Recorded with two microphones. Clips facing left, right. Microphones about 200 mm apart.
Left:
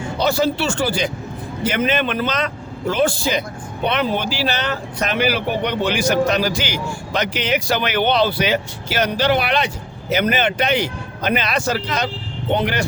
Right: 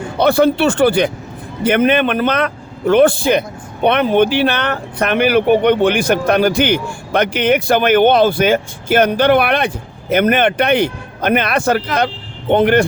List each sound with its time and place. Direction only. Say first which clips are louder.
0.2 s speech: right 7 dB; 60° right (ahead or behind)